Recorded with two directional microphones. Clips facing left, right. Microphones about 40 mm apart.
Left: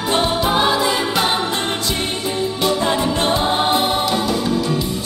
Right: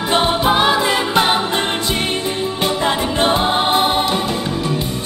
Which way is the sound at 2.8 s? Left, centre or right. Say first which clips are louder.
Right 1 dB; right.